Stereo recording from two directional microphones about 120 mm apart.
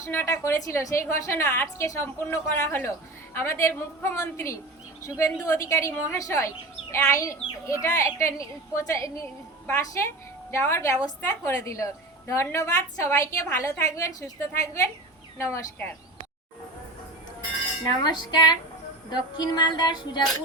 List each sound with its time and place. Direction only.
0.0 s a woman's voice: 20° left (ahead or behind)
18.0 s music: 35° left (ahead or behind)